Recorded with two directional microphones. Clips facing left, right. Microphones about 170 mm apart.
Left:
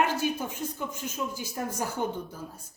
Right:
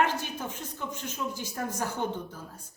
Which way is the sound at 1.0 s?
10° left (ahead or behind).